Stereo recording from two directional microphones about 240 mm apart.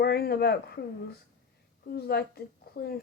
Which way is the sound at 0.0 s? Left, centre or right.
Left.